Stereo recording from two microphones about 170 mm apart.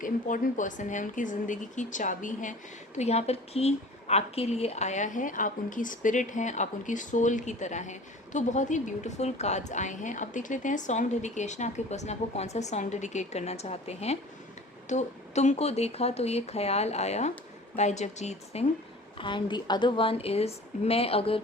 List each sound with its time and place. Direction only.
0.0 s a woman's voice: 50° left (ahead or behind)
19.1 s speech: 30° left (ahead or behind)